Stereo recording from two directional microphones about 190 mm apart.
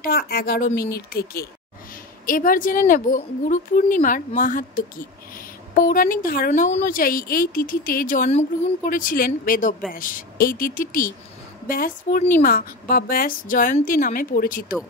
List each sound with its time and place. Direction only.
0.0 s speech: 55° left (ahead or behind)